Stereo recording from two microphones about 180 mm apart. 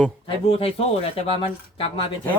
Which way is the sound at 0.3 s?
30° left (ahead or behind).